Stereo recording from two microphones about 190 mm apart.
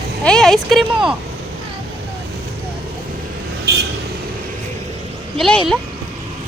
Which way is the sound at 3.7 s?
60° right (ahead or behind).